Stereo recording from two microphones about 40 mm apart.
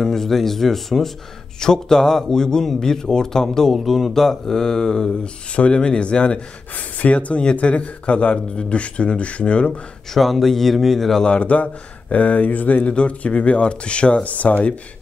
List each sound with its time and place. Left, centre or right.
0.0 s speech: centre
1.6 s speech: centre
3.7 s speech: centre
5.2 s speech: left
7.0 s speech: left
10.1 s speech: centre
11.2 s speech: left
12.9 s speech: left